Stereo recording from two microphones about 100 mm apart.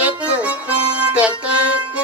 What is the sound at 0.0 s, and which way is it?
Music, 15° right (ahead or behind).